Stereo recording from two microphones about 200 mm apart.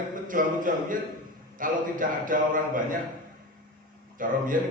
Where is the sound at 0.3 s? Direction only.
45° right (ahead or behind).